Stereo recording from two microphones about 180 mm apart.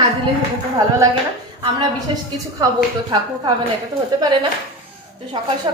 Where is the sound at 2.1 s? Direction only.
30° right (ahead or behind).